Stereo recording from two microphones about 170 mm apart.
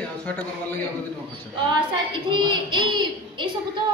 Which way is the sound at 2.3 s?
25° right (ahead or behind).